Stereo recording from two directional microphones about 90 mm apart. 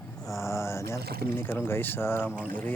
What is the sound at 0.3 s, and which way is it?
Speech, 35° left (ahead or behind).